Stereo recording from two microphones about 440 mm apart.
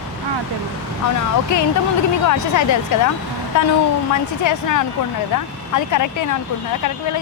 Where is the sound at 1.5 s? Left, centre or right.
Left.